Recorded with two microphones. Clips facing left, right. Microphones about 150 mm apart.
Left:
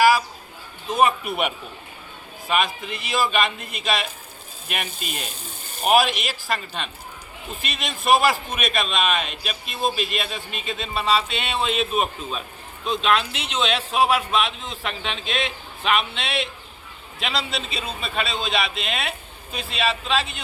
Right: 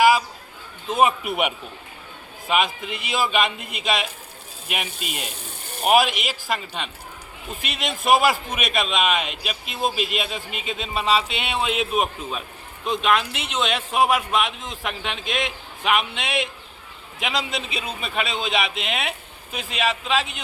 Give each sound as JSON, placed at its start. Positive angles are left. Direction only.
{"t": 0.9, "sound": "a man's voice", "side_deg": -20}
{"t": 2.5, "sound": "a man's voice", "side_deg": -15}
{"t": 4.9, "sound": "speech", "side_deg": -75}
{"t": 5.2, "sound": "ratchet", "side_deg": -70}
{"t": 5.8, "sound": "speech", "side_deg": 0}
{"t": 6.1, "sound": "a man's voice", "side_deg": -15}